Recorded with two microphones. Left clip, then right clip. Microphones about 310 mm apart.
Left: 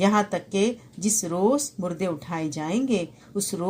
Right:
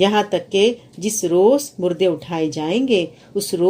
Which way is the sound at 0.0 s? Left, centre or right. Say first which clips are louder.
Right 6 dB; left.